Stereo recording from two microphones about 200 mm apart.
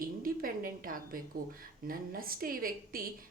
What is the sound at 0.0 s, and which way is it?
A woman's voice, 45° right (ahead or behind).